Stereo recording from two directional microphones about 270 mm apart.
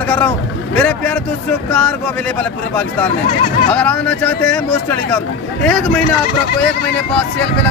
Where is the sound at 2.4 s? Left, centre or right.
Centre.